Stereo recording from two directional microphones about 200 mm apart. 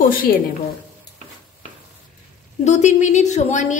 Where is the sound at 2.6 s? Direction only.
35° left (ahead or behind).